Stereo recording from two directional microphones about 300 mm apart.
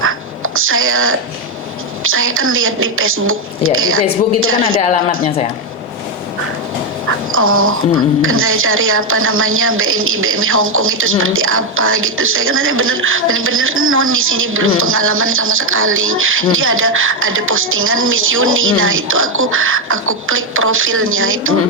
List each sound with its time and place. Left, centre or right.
0.5 s a woman's voice: right
4.8 s speech: left
7.3 s a woman's voice: right